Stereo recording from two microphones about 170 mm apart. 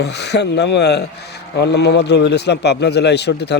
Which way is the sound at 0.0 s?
80° left.